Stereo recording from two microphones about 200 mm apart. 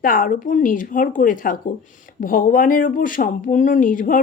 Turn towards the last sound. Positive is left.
turn(degrees=40)  # may be behind; listen again after turning